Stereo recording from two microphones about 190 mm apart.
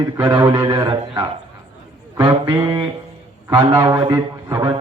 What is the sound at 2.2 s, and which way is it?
A man's voice, 20° right (ahead or behind).